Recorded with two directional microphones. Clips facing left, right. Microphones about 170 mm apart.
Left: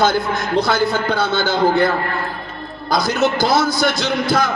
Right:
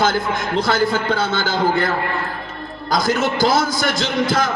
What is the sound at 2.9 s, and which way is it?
A man's voice, 50° right (ahead or behind).